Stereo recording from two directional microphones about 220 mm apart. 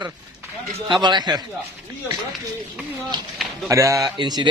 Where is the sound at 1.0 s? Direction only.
20° right (ahead or behind).